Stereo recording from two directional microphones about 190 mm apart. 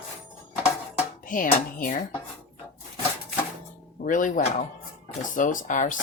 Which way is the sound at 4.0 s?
45° left (ahead or behind).